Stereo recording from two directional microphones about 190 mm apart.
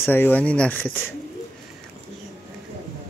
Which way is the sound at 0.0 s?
10° left (ahead or behind).